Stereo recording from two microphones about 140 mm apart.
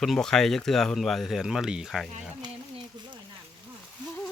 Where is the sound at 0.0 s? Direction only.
5° left (ahead or behind).